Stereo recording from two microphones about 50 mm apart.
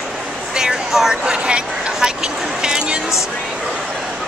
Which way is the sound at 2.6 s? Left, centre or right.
Centre.